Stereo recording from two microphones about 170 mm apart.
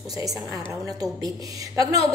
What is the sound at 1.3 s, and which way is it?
Speech, 20° right (ahead or behind).